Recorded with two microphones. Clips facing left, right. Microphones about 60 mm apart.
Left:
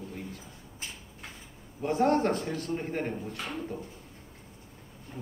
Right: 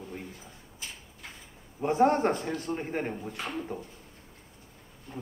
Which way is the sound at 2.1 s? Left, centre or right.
Centre.